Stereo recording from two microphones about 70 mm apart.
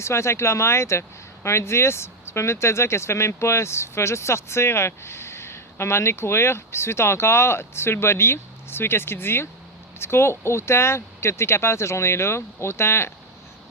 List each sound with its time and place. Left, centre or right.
0.0 s speech: left